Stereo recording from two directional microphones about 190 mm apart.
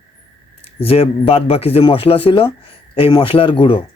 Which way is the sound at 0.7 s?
30° left (ahead or behind).